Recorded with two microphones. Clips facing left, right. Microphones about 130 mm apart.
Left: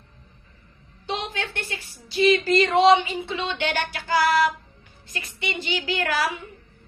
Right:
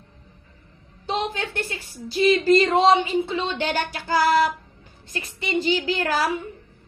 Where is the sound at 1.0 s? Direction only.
40° right (ahead or behind).